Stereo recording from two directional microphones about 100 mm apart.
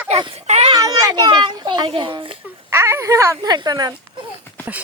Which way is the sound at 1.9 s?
55° right (ahead or behind).